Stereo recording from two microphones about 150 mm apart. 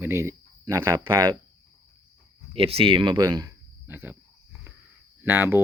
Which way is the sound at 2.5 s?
40° right (ahead or behind).